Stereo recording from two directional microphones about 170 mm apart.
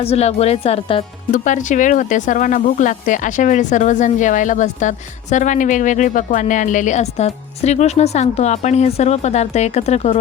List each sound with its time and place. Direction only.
0.0 s speech: 35° left (ahead or behind)
1.3 s speech: 50° left (ahead or behind)